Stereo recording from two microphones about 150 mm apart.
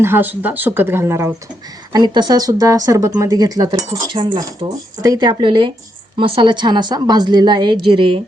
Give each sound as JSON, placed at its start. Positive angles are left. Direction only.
{"t": 0.0, "sound": "speech", "side_deg": -15}
{"t": 1.9, "sound": "a woman's voice", "side_deg": -30}